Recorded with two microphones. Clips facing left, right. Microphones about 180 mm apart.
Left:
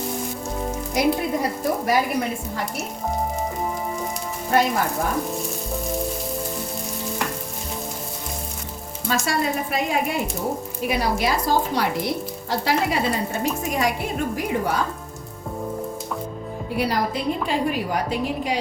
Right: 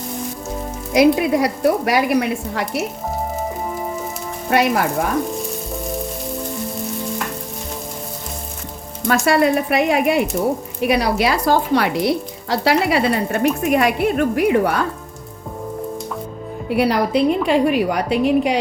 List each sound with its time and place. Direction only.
0.9 s speech: 80° right
4.4 s sizzle: 75° right (ahead or behind)
9.2 s a woman's voice: 65° right (ahead or behind)
16.6 s speech: 70° right (ahead or behind)